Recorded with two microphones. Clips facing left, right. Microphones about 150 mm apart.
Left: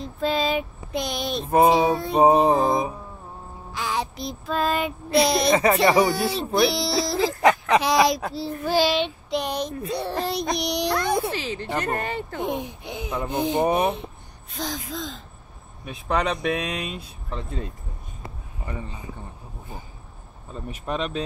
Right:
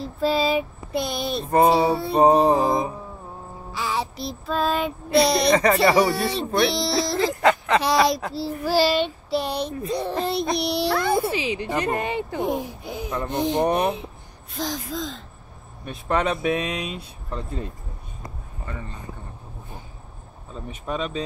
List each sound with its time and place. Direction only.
0.0 s child singing: 5° right (ahead or behind)
12.4 s child singing: centre (ahead or behind)
18.7 s speech: 15° left (ahead or behind)
20.5 s child singing: centre (ahead or behind)